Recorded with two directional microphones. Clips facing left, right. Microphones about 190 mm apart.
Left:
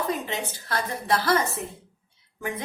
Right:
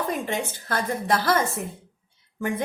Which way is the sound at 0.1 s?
50° right (ahead or behind).